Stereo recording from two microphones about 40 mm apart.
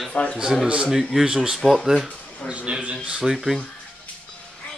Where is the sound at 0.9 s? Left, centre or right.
Centre.